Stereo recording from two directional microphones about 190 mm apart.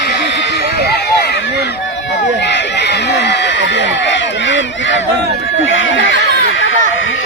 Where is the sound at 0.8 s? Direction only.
55° left (ahead or behind).